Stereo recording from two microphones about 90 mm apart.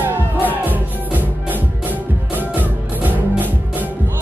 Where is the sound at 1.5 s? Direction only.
20° right (ahead or behind).